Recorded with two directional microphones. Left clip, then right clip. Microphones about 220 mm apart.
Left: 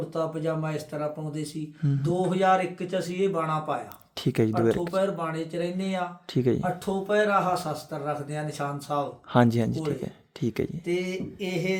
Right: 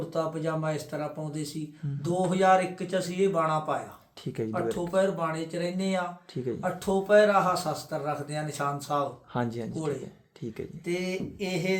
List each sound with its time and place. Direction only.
0.1 s speech: centre (ahead or behind)
4.2 s speech: 55° left (ahead or behind)
4.9 s speech: 5° right (ahead or behind)
6.3 s speech: 55° left (ahead or behind)
6.6 s speech: 5° right (ahead or behind)
9.3 s speech: 55° left (ahead or behind)
10.8 s speech: centre (ahead or behind)